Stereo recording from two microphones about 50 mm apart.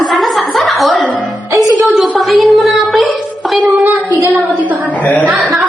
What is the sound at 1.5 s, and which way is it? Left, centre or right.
Music, right.